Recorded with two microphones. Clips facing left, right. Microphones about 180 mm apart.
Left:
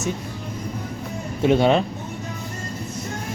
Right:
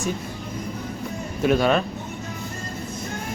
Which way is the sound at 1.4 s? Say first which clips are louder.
Left 2 dB; 25° left (ahead or behind).